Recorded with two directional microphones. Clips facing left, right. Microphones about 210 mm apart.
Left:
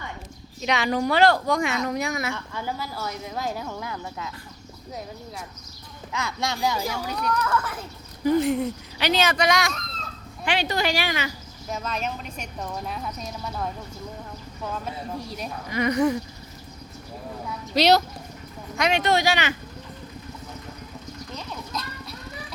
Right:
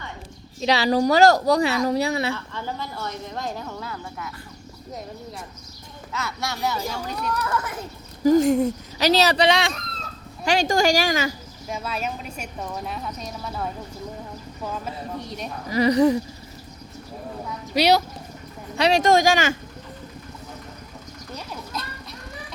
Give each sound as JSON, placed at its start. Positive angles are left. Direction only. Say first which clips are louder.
{"t": 0.6, "sound": "speech", "louder": "right 4 dB", "side_deg": -35}
{"t": 2.3, "sound": "speech", "louder": "right 1 dB", "side_deg": 10}
{"t": 6.1, "sound": "speech", "louder": "left 1 dB", "side_deg": 15}
{"t": 7.4, "sound": "speech", "louder": "left 1 dB", "side_deg": -20}
{"t": 8.2, "sound": "speech", "louder": "right 4 dB", "side_deg": -45}
{"t": 10.4, "sound": "speech", "louder": "right 5 dB", "side_deg": -45}
{"t": 11.7, "sound": "speech", "louder": "right 1 dB", "side_deg": -10}
{"t": 15.7, "sound": "speech", "louder": "right 5 dB", "side_deg": -35}
{"t": 17.7, "sound": "speech", "louder": "even", "side_deg": -10}
{"t": 18.8, "sound": "speech", "louder": "right 4 dB", "side_deg": -40}
{"t": 21.3, "sound": "children playing", "louder": "right 1 dB", "side_deg": -5}